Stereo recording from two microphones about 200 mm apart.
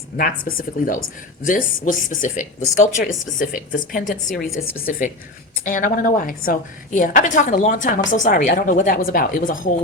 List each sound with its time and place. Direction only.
0.2 s a woman's voice: 45° left (ahead or behind)
4.5 s a woman's voice: 10° left (ahead or behind)
4.9 s a woman's voice: 40° left (ahead or behind)